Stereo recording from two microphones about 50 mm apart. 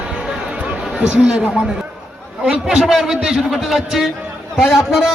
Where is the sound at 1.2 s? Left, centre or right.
Centre.